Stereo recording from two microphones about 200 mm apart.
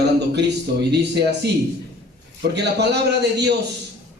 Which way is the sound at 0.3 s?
55° right (ahead or behind).